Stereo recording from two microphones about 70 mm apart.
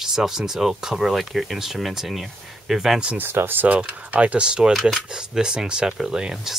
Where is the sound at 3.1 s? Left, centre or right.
Right; by 4.7 s centre.